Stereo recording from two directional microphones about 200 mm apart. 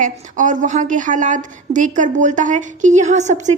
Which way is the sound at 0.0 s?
40° right (ahead or behind).